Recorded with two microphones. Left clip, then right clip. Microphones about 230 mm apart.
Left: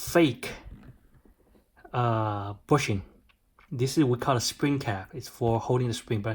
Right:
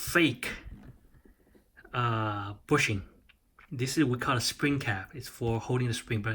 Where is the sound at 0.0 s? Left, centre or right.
Centre.